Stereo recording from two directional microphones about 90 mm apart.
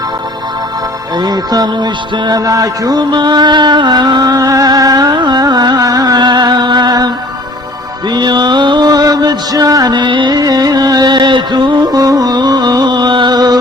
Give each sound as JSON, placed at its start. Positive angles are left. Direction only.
{"t": 1.2, "sound": "music", "side_deg": -45}
{"t": 8.1, "sound": "music", "side_deg": -55}